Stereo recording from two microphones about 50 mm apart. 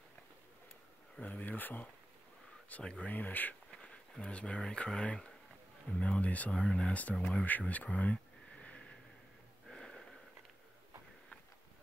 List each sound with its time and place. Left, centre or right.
1.2 s speech: left
2.8 s speech: centre
3.1 s speech: left
3.7 s speech: centre
6.5 s speech: centre
7.4 s a sound: left
9.7 s wheeze: centre